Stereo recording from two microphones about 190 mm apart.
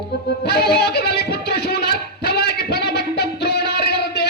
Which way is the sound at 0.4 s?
60° left (ahead or behind).